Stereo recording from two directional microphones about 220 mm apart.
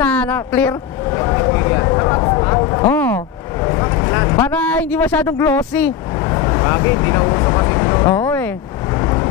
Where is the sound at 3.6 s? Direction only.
20° left (ahead or behind).